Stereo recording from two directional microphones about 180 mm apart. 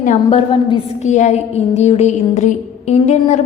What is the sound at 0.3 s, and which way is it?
A woman's voice, 30° left (ahead or behind).